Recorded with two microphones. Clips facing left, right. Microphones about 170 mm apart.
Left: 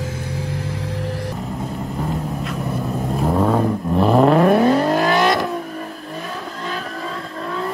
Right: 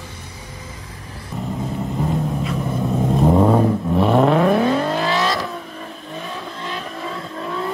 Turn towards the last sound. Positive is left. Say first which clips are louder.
# even
turn(degrees=0)  # may be behind; listen again after turning